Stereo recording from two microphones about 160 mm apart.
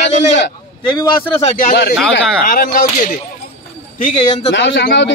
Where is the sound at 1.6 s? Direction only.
75° left (ahead or behind).